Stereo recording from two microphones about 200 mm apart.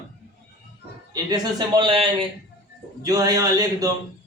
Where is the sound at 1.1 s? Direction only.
20° right (ahead or behind).